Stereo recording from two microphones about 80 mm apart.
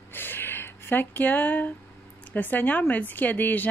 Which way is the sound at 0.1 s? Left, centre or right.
Left.